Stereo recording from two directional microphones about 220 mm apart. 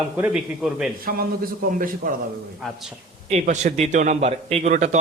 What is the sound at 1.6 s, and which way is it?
Speech, 40° right (ahead or behind).